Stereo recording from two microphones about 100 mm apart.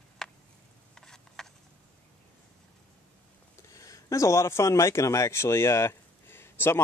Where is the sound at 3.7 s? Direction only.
35° left (ahead or behind).